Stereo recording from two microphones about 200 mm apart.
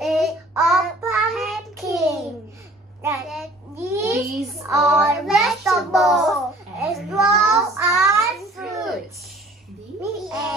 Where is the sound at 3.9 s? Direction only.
15° right (ahead or behind).